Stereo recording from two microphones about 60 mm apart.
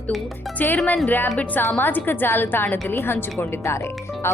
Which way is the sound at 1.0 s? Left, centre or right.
Left.